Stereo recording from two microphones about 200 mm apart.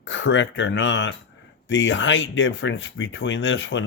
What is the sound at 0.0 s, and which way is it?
Speech, 65° left (ahead or behind).